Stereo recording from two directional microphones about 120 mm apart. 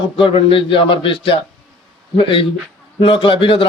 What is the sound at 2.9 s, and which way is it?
Speech, 45° left (ahead or behind).